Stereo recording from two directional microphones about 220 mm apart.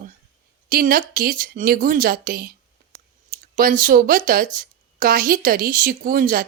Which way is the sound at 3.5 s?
40° right (ahead or behind).